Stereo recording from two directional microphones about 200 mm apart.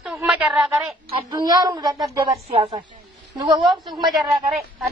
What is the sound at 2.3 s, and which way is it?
Speech, 30° right (ahead or behind).